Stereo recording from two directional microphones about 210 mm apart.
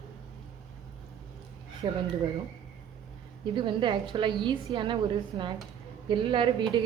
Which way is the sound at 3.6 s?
20° right (ahead or behind).